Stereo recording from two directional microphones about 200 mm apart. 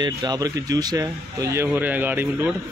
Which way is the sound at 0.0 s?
20° right (ahead or behind).